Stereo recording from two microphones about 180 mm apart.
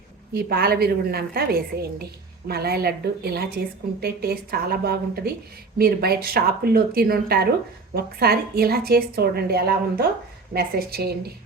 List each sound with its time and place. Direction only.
0.3 s a woman's voice: 60° right (ahead or behind)